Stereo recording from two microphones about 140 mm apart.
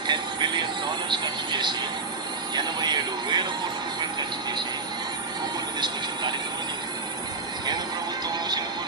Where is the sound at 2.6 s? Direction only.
30° right (ahead or behind).